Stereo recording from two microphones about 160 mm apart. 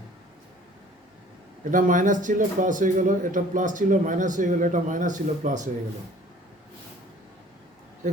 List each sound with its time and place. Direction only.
1.7 s a man's voice: 55° right (ahead or behind)